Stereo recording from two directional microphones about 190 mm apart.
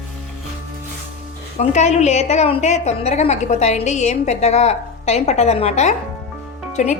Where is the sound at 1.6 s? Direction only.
35° left (ahead or behind).